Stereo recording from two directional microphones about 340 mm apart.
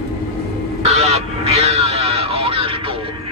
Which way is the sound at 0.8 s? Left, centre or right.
Centre.